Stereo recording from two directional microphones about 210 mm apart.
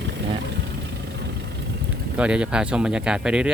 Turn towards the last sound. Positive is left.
turn(degrees=-5)  # may be behind; listen again after turning